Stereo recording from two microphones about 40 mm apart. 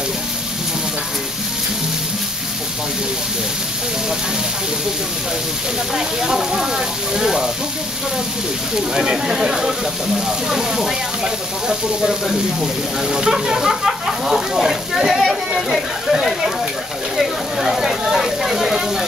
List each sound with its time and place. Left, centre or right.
5.9 s speech: centre
8.7 s speech: centre